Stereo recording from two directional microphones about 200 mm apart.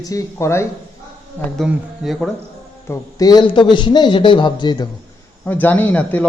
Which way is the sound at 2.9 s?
20° left (ahead or behind).